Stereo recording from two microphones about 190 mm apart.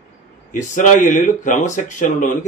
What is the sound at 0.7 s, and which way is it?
A man's voice, 40° left (ahead or behind).